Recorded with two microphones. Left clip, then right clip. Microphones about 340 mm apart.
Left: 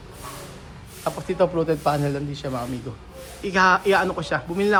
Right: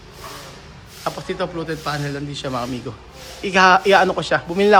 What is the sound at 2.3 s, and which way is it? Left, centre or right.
A man's voice, centre.